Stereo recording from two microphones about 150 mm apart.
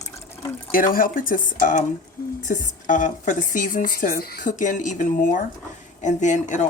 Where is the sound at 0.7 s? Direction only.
70° left (ahead or behind).